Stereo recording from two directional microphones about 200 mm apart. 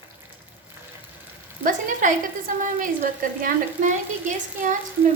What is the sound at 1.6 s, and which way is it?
A woman's voice, 40° right (ahead or behind).